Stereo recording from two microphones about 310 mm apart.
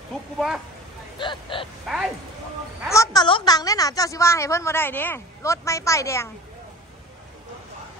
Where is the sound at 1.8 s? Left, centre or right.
Centre.